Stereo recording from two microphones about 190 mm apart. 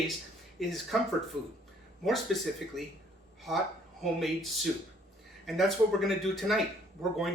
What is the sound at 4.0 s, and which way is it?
Speech, centre (ahead or behind).